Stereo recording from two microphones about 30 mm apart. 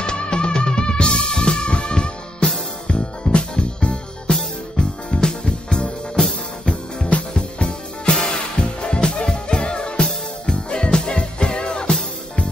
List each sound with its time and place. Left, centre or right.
0.0 s music: left
7.3 s music: left